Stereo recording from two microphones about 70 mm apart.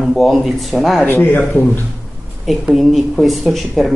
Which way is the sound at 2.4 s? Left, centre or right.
Centre.